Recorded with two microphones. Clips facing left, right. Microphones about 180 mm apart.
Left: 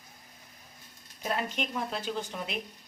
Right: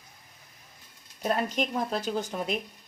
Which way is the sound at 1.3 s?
40° right (ahead or behind).